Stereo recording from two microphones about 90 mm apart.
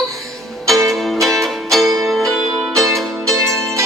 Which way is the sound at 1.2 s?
Centre (ahead or behind).